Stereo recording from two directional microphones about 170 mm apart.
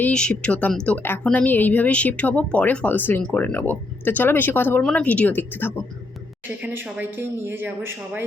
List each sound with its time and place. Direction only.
0.0 s a woman's voice: 5° left (ahead or behind)
6.6 s speech: 5° right (ahead or behind)